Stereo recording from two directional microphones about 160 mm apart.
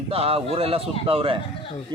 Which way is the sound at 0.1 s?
35° right (ahead or behind).